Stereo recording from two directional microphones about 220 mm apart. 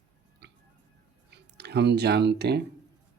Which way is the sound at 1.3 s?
50° right (ahead or behind).